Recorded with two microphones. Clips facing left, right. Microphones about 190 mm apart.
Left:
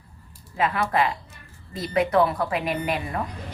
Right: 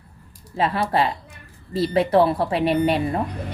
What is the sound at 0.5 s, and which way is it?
A woman's voice, 30° right (ahead or behind).